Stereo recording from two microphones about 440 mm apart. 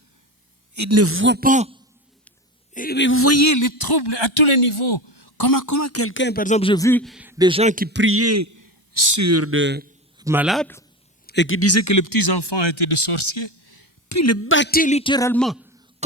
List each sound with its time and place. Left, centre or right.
0.7 s a man's voice: right; by 1.8 s centre
2.7 s speech: left; by 9.9 s right
10.2 s speech: centre
11.3 s speech: left
14.1 s speech: left; by 15.7 s centre